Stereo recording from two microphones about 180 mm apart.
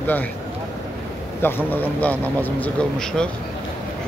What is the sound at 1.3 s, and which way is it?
Speech, 10° left (ahead or behind).